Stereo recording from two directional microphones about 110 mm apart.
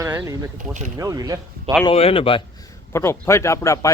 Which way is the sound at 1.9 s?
60° left (ahead or behind).